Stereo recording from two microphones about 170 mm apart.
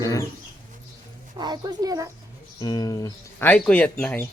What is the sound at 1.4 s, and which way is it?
Speech, 25° right (ahead or behind).